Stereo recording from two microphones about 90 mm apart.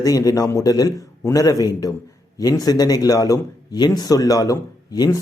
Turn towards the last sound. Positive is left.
turn(degrees=40)  # may be behind; listen again after turning